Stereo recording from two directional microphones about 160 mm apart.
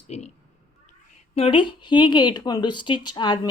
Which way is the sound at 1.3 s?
35° left (ahead or behind).